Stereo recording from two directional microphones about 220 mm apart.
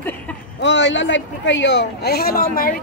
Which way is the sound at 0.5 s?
55° left (ahead or behind).